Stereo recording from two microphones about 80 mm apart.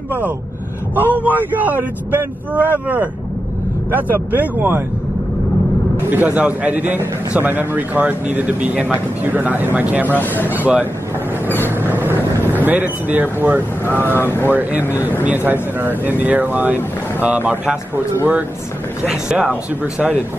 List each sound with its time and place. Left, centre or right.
0.9 s a man's voice: right
3.9 s a man's voice: right
5.9 s a man's voice: right
10.0 s a man's voice: left
11.4 s vehicle: left
11.7 s vehicle: right
12.2 s vehicle: left
12.6 s a man's voice: right
14.2 s a man's voice: left
14.5 s a man's voice: right
19.0 s speech: centre
19.8 s a man's voice: centre